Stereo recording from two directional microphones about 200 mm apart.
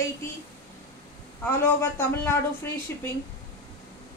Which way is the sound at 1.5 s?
10° left (ahead or behind).